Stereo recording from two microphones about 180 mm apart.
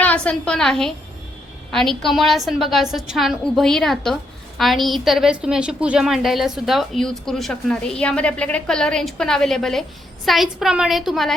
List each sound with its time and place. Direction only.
0.0 s a woman's voice: 10° left (ahead or behind)